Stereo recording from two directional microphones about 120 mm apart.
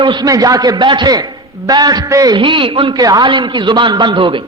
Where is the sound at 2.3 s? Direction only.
45° right (ahead or behind).